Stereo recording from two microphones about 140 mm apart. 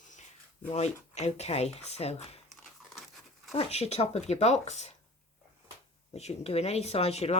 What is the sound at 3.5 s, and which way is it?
Speech, 50° left (ahead or behind).